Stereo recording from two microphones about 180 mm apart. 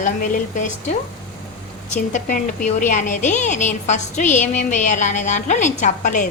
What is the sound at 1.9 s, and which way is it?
A woman's voice, 45° left (ahead or behind).